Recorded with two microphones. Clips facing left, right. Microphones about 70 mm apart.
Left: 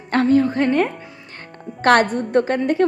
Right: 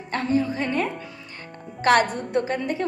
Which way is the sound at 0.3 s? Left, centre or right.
Left.